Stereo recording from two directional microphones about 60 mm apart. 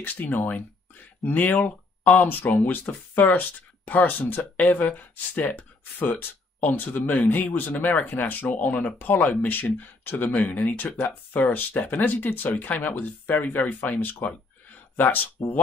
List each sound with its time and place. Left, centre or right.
0.0 s speech: left